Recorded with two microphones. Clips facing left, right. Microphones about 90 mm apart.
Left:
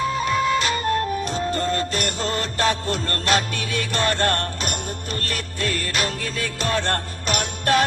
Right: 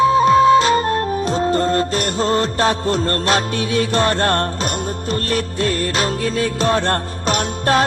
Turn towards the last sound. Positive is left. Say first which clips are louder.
# right 4 dB
turn(degrees=-30)  # may be behind; listen again after turning